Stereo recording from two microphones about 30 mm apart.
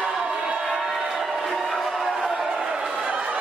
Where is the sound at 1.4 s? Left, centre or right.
Centre.